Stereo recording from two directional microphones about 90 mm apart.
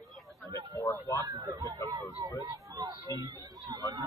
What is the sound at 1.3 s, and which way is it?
Speech, 45° right (ahead or behind).